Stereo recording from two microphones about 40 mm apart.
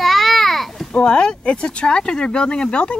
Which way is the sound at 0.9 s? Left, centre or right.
Left.